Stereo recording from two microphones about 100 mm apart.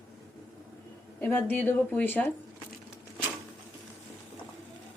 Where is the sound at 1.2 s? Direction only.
20° left (ahead or behind).